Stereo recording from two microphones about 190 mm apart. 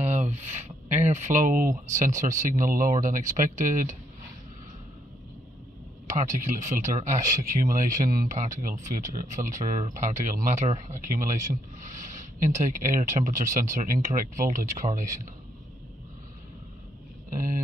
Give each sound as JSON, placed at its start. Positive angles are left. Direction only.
{"t": 0.0, "sound": "speech", "side_deg": -35}
{"t": 6.0, "sound": "speech", "side_deg": -40}